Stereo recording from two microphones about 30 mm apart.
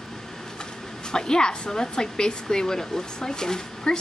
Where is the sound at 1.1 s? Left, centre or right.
Left.